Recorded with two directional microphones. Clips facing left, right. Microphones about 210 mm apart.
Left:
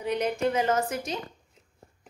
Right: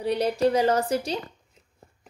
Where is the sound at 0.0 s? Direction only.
35° right (ahead or behind).